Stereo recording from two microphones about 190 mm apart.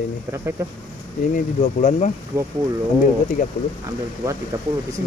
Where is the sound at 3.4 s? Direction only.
45° left (ahead or behind).